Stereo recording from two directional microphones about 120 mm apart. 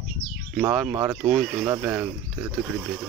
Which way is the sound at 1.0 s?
5° right (ahead or behind).